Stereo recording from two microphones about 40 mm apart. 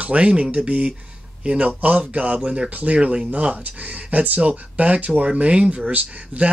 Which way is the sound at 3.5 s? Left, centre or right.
Right.